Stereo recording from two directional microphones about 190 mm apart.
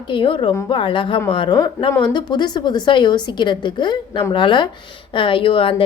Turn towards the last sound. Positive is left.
turn(degrees=30)  # may be behind; listen again after turning